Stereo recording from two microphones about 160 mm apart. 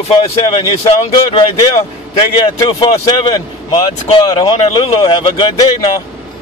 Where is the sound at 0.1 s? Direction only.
35° left (ahead or behind).